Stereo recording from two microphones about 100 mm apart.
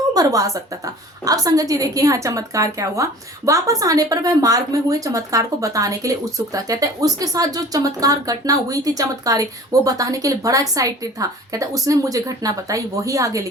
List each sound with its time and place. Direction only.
0.1 s a woman's voice: 35° right (ahead or behind)